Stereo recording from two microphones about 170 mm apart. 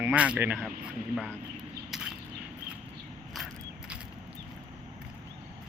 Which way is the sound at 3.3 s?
5° right (ahead or behind).